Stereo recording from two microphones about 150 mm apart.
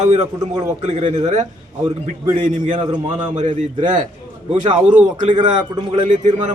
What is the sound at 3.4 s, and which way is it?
A man's voice, 50° right (ahead or behind).